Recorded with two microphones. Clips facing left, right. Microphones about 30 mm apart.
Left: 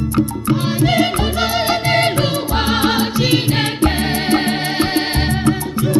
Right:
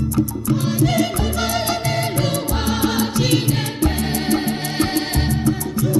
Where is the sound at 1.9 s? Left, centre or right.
Left.